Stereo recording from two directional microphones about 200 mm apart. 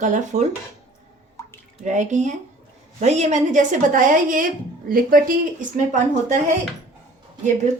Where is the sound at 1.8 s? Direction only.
40° right (ahead or behind).